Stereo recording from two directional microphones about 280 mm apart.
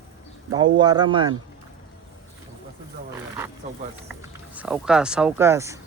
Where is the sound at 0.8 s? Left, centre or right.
Centre.